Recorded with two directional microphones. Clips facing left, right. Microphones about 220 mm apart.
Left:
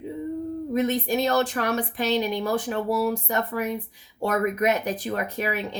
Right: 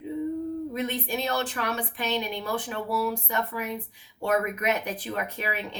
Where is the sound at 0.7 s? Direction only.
40° left (ahead or behind).